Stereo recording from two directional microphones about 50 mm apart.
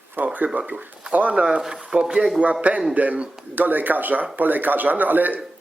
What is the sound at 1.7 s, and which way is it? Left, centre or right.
Speech, centre.